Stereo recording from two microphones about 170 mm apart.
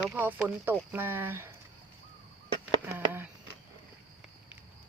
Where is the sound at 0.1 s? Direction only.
10° right (ahead or behind).